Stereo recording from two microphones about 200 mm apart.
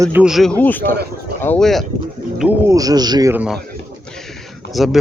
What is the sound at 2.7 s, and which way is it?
Speech, 20° right (ahead or behind).